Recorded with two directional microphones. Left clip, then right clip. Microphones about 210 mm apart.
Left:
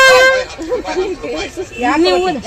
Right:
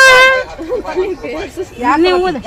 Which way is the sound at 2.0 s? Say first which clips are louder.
Right 1 dB; 20° left (ahead or behind).